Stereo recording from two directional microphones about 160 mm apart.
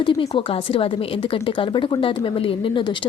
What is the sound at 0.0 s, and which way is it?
Speech, 35° left (ahead or behind).